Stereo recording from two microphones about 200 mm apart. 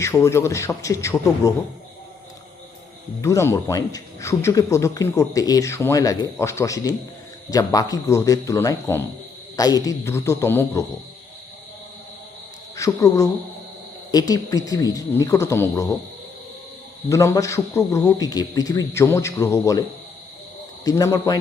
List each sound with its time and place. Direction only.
0.0 s speech: 15° left (ahead or behind)
3.2 s speech: 15° left (ahead or behind)
12.7 s speech: 15° left (ahead or behind)
17.1 s speech: 15° left (ahead or behind)
20.8 s speech: 15° left (ahead or behind)